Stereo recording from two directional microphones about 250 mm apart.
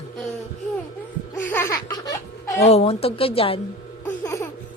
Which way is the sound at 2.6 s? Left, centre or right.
Left.